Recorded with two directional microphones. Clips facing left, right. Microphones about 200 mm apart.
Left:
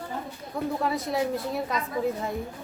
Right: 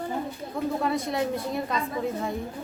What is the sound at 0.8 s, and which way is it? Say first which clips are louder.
Speech: even; centre (ahead or behind).